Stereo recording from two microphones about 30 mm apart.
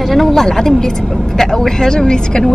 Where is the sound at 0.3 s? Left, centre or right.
Centre.